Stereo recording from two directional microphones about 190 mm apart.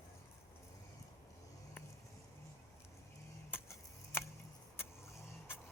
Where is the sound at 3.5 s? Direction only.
15° left (ahead or behind).